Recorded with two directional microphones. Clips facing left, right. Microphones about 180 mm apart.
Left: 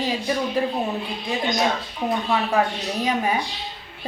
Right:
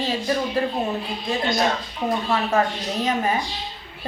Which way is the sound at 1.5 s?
Centre (ahead or behind).